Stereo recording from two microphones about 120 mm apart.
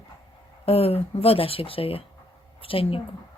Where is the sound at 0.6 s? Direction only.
55° left (ahead or behind).